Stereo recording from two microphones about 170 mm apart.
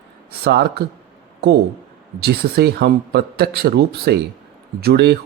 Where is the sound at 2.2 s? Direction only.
70° right (ahead or behind).